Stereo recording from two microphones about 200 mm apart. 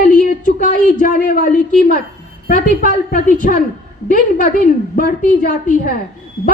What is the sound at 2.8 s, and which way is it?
A man's voice, 45° left (ahead or behind).